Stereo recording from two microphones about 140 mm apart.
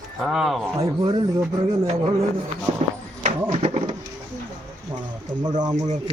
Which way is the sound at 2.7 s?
50° right (ahead or behind).